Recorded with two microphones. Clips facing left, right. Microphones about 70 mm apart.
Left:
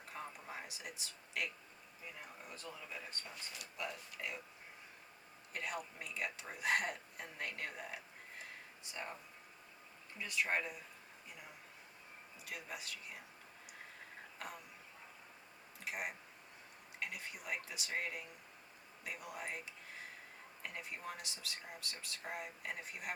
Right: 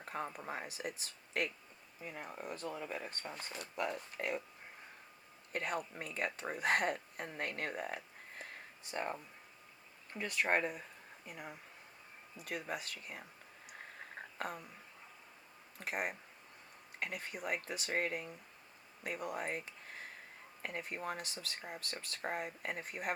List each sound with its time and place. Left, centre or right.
0.0 s speech: right
5.5 s speech: right
12.4 s speech: right
14.3 s a sound: right
15.8 s speech: right